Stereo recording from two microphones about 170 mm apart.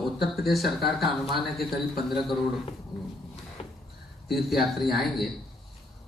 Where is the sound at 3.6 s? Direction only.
35° left (ahead or behind).